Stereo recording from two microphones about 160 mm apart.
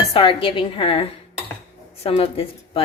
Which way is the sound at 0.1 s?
35° left (ahead or behind).